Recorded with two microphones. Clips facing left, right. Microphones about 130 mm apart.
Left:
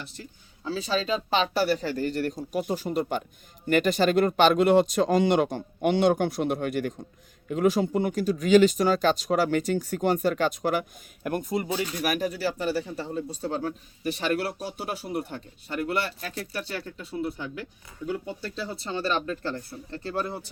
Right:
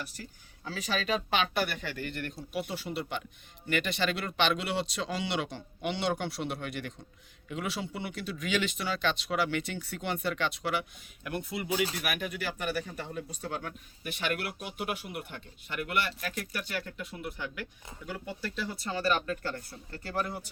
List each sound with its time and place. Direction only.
0.0 s speech: 25° left (ahead or behind)